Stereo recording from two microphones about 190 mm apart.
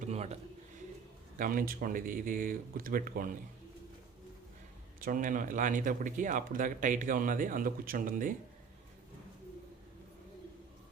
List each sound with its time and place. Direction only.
0.0 s a sound: 35° right (ahead or behind)
1.4 s speech: 45° right (ahead or behind)
4.9 s speech: 45° right (ahead or behind)